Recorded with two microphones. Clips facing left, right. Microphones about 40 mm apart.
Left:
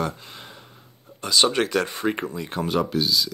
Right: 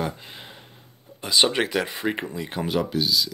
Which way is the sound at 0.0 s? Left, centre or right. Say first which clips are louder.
Left 1 dB; centre.